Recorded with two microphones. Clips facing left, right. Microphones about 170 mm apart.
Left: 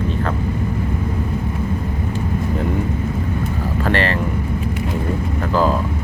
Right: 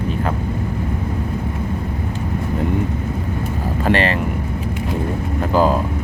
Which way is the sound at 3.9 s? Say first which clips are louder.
Right 2 dB; 15° right (ahead or behind).